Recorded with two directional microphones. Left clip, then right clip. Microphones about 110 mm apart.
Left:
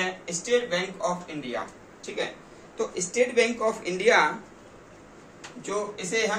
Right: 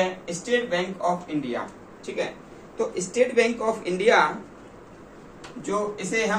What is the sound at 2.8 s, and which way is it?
Speech, 40° left (ahead or behind).